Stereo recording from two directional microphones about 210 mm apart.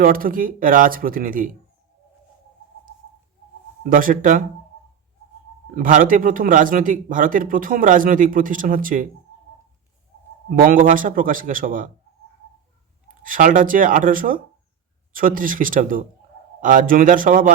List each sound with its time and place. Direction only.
0.0 s speech: 40° right (ahead or behind)
3.8 s speech: 40° right (ahead or behind)
5.7 s speech: 40° right (ahead or behind)
10.5 s speech: 40° right (ahead or behind)
13.1 s speech: 40° right (ahead or behind)